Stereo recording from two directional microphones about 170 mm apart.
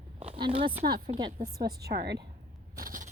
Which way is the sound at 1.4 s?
65° right (ahead or behind).